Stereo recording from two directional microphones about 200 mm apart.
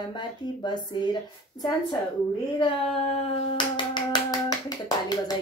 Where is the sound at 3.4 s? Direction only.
25° left (ahead or behind).